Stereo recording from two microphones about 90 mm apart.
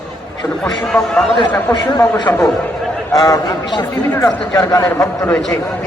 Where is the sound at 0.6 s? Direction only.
10° left (ahead or behind).